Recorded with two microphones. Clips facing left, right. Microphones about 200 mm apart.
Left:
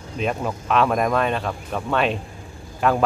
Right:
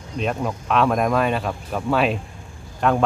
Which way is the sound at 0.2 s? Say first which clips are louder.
Even; centre (ahead or behind).